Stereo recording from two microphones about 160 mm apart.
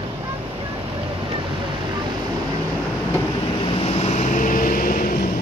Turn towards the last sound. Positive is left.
turn(degrees=60)  # may be behind; listen again after turning